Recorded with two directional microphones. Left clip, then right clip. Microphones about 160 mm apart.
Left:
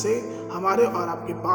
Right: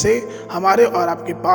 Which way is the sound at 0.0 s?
50° right (ahead or behind).